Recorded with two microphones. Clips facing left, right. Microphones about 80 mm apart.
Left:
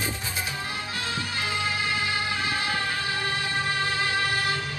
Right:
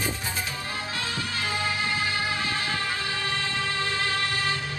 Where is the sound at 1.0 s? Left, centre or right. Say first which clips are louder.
Left 2 dB; left.